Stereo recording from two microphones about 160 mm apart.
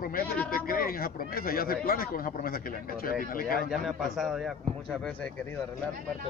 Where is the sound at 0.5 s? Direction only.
65° left (ahead or behind).